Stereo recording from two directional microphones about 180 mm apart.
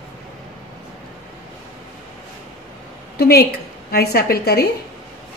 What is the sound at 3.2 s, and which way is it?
A woman's voice, 60° left (ahead or behind).